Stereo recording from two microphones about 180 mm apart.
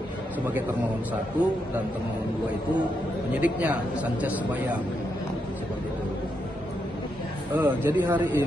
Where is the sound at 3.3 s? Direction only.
10° right (ahead or behind).